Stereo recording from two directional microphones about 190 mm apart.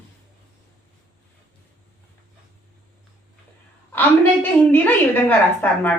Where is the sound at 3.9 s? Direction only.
10° left (ahead or behind).